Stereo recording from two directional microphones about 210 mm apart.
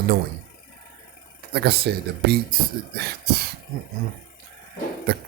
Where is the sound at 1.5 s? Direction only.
50° right (ahead or behind).